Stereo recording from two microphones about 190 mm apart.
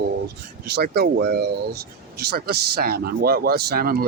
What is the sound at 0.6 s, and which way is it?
Speech, 55° right (ahead or behind).